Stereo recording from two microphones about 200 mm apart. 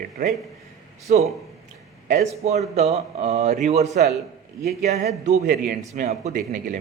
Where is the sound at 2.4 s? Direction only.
35° right (ahead or behind).